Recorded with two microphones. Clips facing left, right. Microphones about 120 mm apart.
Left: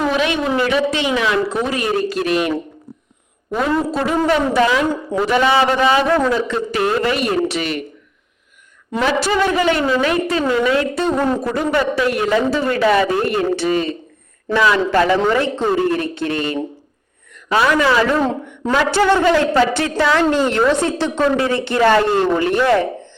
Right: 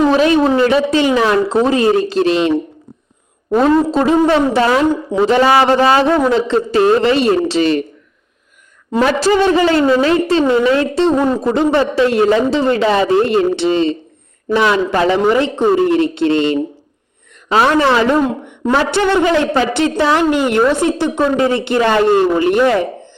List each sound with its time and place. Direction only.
0.1 s a woman's voice: 35° right (ahead or behind)
3.6 s a woman's voice: 25° right (ahead or behind)
6.1 s a woman's voice: 25° right (ahead or behind)
8.9 s a woman's voice: 35° right (ahead or behind)
17.9 s a woman's voice: 25° right (ahead or behind)